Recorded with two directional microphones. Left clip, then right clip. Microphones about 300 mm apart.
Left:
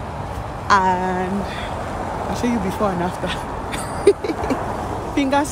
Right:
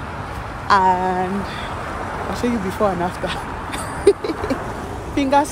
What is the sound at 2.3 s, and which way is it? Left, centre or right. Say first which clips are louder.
Speech: right 1 dB; centre.